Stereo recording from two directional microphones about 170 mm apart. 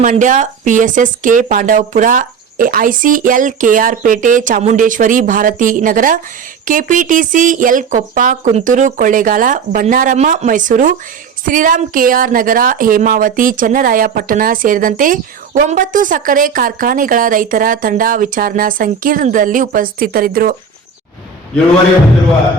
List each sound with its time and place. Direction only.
0.0 s a woman's voice: 50° right (ahead or behind)